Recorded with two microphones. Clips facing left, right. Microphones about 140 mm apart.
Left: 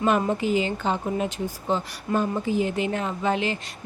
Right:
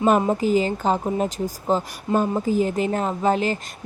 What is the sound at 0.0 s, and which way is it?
Speech, 40° right (ahead or behind).